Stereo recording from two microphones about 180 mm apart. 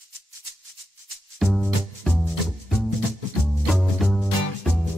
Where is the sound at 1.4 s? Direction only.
Centre (ahead or behind).